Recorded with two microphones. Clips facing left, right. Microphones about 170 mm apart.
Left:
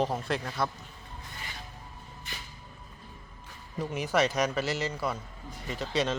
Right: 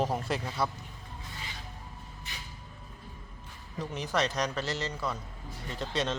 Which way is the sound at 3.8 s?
10° left (ahead or behind).